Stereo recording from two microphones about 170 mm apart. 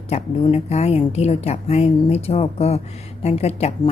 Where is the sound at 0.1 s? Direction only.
40° left (ahead or behind).